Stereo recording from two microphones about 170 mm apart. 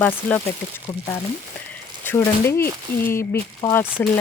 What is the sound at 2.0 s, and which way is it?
Speech, 15° left (ahead or behind).